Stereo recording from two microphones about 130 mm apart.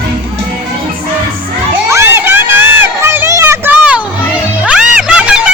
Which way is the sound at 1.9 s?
20° right (ahead or behind).